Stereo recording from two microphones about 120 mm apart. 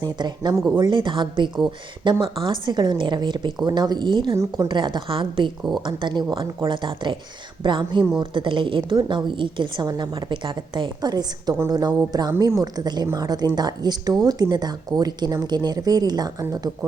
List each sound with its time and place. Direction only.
0.0 s a woman's voice: 35° right (ahead or behind)
4.4 s speech: 30° right (ahead or behind)
4.7 s a woman's voice: 40° right (ahead or behind)